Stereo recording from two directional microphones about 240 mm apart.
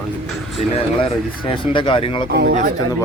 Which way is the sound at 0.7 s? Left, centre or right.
Left.